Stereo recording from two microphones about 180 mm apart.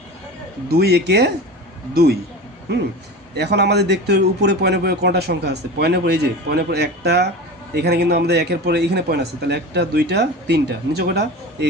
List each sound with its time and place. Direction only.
0.7 s speech: 65° right (ahead or behind)
3.3 s speech: 70° right (ahead or behind)